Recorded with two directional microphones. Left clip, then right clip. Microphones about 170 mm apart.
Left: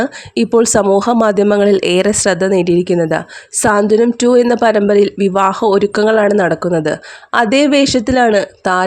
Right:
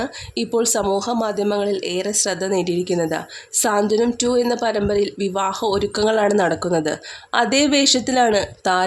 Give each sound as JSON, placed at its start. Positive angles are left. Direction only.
{"t": 0.0, "sound": "speech", "side_deg": 40}